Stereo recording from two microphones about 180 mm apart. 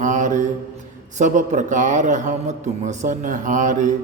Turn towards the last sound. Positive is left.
turn(degrees=-45)  # may be behind; listen again after turning